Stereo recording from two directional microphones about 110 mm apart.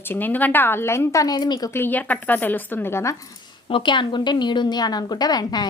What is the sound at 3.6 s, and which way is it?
A woman's voice, 50° left (ahead or behind).